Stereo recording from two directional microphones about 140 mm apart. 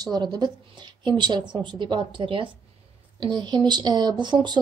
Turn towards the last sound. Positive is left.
turn(degrees=-30)  # may be behind; listen again after turning